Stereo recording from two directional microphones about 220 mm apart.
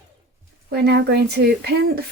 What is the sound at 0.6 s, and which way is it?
Speech, 50° right (ahead or behind).